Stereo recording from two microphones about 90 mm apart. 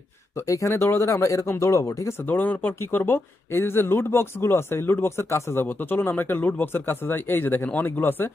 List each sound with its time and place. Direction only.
0.5 s speech: 35° left (ahead or behind)
2.2 s speech: 20° left (ahead or behind)